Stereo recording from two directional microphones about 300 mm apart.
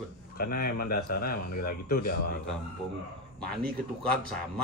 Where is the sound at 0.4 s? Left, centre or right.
Left.